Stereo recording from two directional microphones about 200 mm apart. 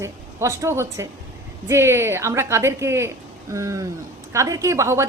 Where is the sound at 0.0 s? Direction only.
15° right (ahead or behind).